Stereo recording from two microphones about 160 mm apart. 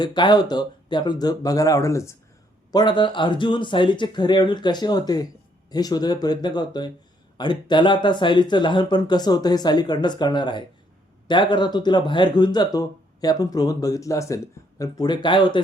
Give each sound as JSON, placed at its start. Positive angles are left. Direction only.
{"t": 0.0, "sound": "speech", "side_deg": 30}
{"t": 2.7, "sound": "speech", "side_deg": 30}